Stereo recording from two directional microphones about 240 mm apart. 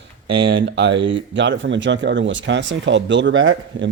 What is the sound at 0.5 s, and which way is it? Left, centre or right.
Speech, right.